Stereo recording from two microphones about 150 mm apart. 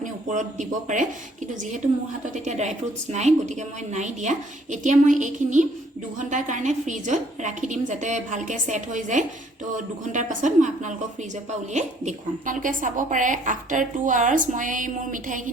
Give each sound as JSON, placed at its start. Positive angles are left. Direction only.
{"t": 0.0, "sound": "speech", "side_deg": -55}
{"t": 2.2, "sound": "a woman's voice", "side_deg": -55}